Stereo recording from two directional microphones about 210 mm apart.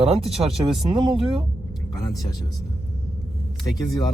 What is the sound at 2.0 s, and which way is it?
Speech, 15° left (ahead or behind).